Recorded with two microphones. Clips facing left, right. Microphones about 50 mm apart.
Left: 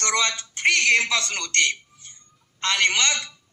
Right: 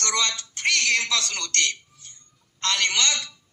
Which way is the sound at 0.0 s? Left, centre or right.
Left.